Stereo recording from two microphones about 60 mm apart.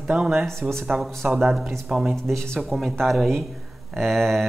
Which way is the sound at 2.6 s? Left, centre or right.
Centre.